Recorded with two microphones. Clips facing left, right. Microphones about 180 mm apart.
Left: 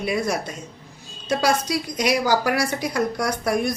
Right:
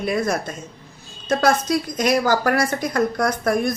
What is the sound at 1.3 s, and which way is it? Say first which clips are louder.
A woman's voice: right 3 dB; 50° right (ahead or behind).